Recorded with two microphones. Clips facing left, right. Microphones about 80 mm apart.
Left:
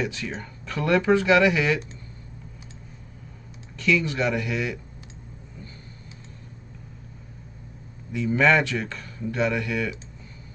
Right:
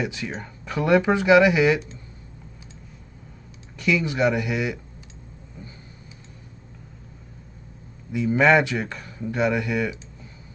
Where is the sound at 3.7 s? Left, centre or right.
Centre.